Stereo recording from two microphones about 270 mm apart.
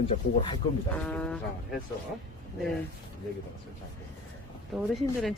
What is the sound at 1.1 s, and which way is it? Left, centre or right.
Speech, centre.